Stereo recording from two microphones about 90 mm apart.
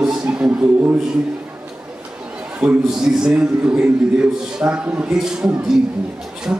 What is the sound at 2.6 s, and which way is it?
A man's voice, 10° right (ahead or behind).